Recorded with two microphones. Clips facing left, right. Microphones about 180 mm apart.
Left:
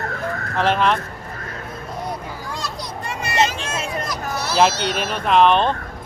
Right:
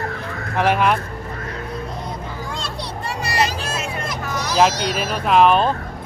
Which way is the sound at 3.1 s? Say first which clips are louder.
Left 1 dB; 35° right (ahead or behind).